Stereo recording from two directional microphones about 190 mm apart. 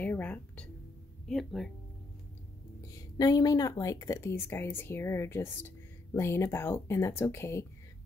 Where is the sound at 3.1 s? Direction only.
20° left (ahead or behind).